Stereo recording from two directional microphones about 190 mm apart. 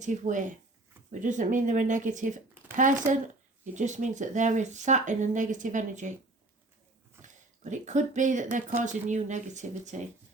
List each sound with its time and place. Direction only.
0.0 s speech: 40° right (ahead or behind)
7.2 s speech: 40° right (ahead or behind)